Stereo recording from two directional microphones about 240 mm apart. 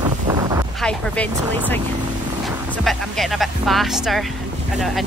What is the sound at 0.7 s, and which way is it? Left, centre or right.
Speech, centre.